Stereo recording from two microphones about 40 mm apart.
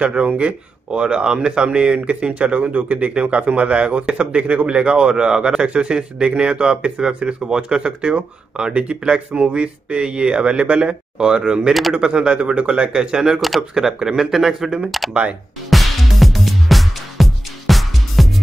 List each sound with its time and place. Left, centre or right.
0.0 s speech: right; by 14.9 s centre
15.7 s music: centre